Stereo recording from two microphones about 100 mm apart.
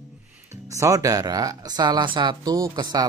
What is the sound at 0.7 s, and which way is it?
Speech, 30° right (ahead or behind).